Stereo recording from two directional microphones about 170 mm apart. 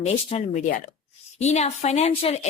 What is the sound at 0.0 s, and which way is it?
A woman's voice, 40° left (ahead or behind).